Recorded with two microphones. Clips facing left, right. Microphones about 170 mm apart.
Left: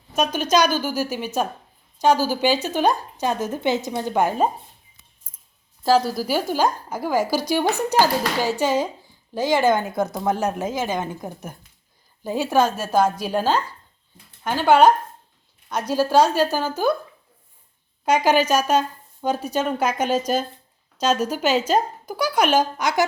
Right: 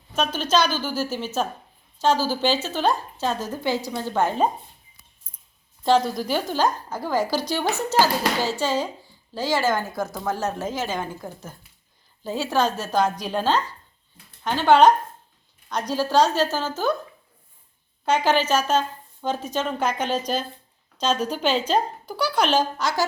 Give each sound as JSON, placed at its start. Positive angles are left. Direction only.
{"t": 0.1, "sound": "a woman's voice", "side_deg": 10}
{"t": 5.8, "sound": "a woman's voice", "side_deg": 5}
{"t": 18.0, "sound": "a woman's voice", "side_deg": 10}